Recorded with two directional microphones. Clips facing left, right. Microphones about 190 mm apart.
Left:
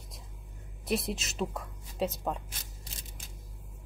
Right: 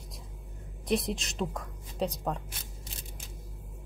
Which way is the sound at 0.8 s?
5° left (ahead or behind).